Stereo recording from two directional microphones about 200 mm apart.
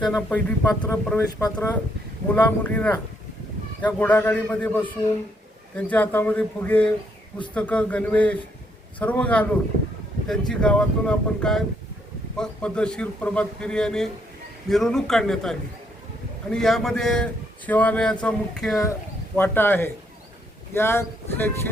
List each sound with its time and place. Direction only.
0.0 s a man's voice: 5° left (ahead or behind)